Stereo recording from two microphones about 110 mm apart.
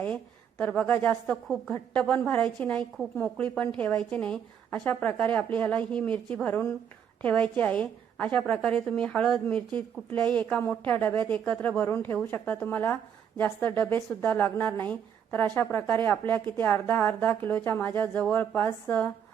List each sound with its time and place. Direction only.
0.6 s a woman's voice: 10° left (ahead or behind)